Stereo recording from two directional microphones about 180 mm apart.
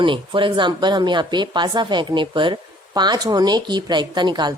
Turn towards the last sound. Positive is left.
turn(degrees=-25)  # may be behind; listen again after turning